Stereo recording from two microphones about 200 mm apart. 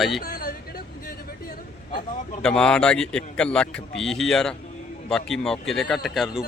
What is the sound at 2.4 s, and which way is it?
Speech, 5° left (ahead or behind).